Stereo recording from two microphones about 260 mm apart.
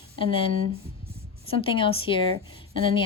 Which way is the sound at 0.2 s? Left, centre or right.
Centre.